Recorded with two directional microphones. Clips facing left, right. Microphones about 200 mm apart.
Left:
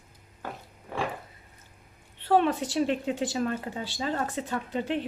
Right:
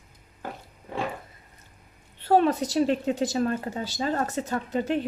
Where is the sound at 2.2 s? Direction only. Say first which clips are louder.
Right 3 dB; 40° right (ahead or behind).